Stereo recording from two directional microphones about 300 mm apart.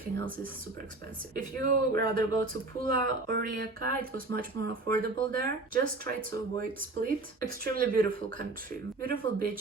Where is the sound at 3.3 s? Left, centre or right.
Right.